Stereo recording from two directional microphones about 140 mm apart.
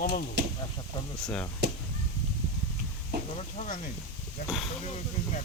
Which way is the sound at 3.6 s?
65° left (ahead or behind).